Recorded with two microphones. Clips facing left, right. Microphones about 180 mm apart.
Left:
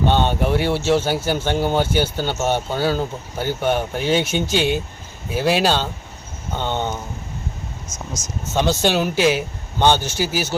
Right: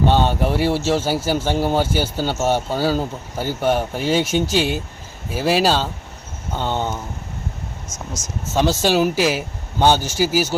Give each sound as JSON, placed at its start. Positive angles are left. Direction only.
{"t": 0.1, "sound": "a man's voice", "side_deg": -5}
{"t": 7.9, "sound": "speech", "side_deg": -25}
{"t": 8.5, "sound": "speech", "side_deg": -5}